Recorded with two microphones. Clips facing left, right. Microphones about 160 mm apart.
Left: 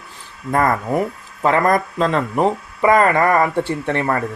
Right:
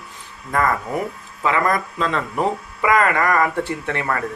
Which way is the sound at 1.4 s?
40° left (ahead or behind).